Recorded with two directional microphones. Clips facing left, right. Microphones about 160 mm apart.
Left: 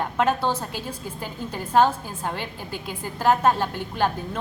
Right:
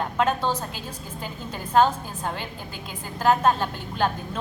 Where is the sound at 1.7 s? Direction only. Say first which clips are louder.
Even; 10° left (ahead or behind).